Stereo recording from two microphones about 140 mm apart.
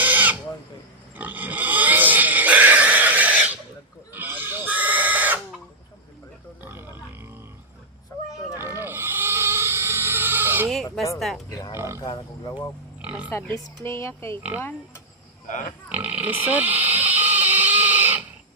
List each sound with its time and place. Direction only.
0.0 s a sound: 10° right (ahead or behind)
1.1 s pig: 10° right (ahead or behind)
4.1 s chicken: 15° right (ahead or behind)
6.6 s grunt: 15° right (ahead or behind)
8.5 s pig: 15° right (ahead or behind)
11.4 s speech: 25° left (ahead or behind)
13.0 s oink: 10° right (ahead or behind)
13.3 s speech: 20° left (ahead or behind)
15.9 s pig: 10° right (ahead or behind)